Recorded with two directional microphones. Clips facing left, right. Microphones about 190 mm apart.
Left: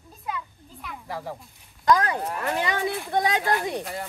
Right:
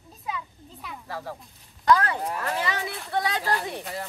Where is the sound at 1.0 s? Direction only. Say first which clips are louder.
Left 2 dB; 15° left (ahead or behind).